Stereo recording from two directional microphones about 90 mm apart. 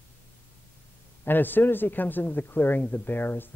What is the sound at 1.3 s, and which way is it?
Speech, 20° left (ahead or behind).